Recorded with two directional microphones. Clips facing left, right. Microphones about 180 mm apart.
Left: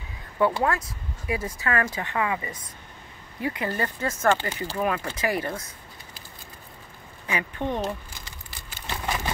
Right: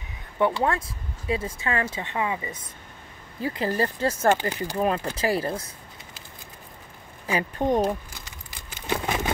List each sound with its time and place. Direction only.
0.7 s speech: 30° right (ahead or behind)
3.3 s speech: 30° right (ahead or behind)
4.3 s speech: 15° right (ahead or behind)
4.7 s speech: 30° right (ahead or behind)
7.2 s speech: 35° right (ahead or behind)
8.5 s crumpling: 15° right (ahead or behind)